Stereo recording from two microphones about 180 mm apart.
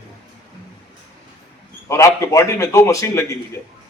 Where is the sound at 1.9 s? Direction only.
15° left (ahead or behind).